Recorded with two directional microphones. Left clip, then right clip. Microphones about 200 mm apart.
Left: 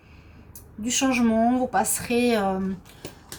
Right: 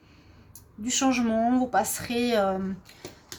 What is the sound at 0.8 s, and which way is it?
A woman's voice, 35° right (ahead or behind).